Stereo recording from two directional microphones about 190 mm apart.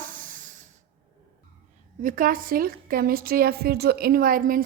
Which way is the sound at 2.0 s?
45° right (ahead or behind).